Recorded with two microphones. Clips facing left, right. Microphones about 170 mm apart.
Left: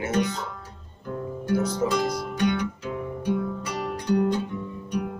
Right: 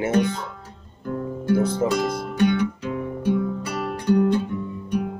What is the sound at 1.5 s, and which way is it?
Music, 55° right (ahead or behind).